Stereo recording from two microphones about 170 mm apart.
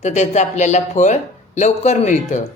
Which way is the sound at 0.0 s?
45° left (ahead or behind).